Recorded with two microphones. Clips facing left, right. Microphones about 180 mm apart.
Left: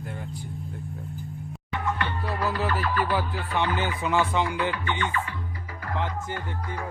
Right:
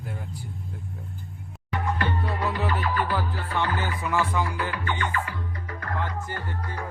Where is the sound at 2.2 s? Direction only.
Centre (ahead or behind).